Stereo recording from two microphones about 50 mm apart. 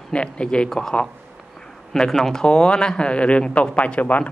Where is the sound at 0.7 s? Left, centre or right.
Centre.